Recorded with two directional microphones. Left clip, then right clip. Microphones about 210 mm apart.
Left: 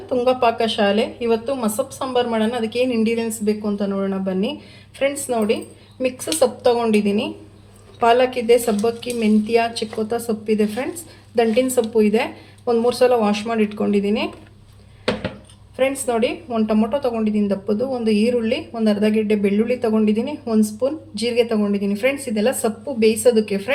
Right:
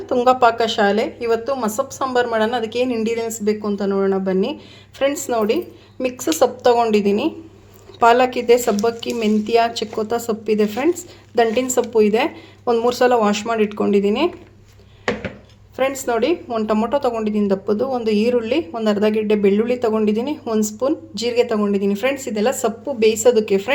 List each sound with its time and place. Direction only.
0.1 s speech: 35° right (ahead or behind)
15.7 s speech: 40° right (ahead or behind)